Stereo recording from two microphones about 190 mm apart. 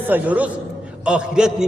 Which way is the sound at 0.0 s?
10° right (ahead or behind).